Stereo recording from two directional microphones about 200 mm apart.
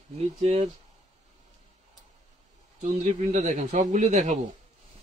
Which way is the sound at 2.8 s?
35° right (ahead or behind).